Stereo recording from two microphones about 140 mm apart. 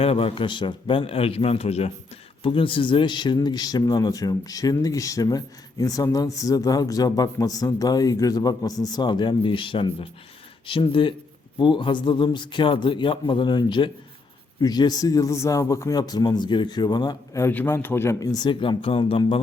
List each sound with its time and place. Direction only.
0.0 s a man's voice: 45° left (ahead or behind)
17.4 s speech: 15° left (ahead or behind); by 19.4 s 40° left (ahead or behind)